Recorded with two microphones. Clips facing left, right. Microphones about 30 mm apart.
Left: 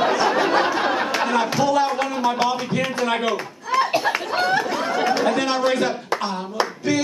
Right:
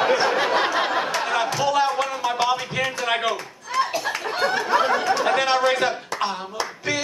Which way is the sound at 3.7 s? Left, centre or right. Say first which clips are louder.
Left 3 dB; centre.